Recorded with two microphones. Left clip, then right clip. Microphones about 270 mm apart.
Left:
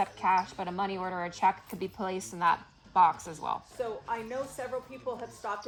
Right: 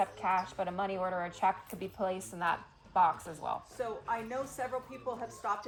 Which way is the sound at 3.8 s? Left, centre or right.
Centre.